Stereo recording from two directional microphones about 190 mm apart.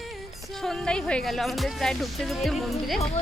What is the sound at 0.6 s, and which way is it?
Speech, 5° left (ahead or behind).